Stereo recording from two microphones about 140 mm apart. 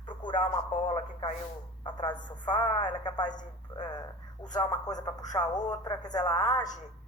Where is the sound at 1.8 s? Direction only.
35° left (ahead or behind).